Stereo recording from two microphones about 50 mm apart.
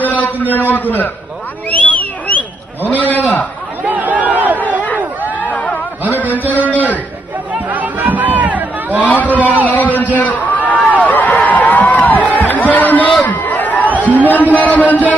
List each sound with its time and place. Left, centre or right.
0.0 s a man's voice: left
1.7 s sheep: left
3.8 s a sound: right
4.8 s a sound: left
7.5 s chatter: right
9.0 s speech: left
9.7 s a sound: left
13.2 s crowd: left
14.0 s speech: left